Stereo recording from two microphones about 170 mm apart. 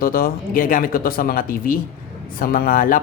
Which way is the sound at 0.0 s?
60° left (ahead or behind).